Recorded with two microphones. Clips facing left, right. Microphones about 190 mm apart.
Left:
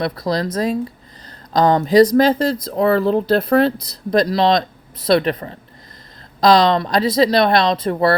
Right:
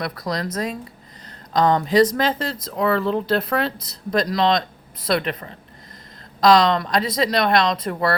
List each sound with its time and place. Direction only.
0.0 s speech: 30° left (ahead or behind)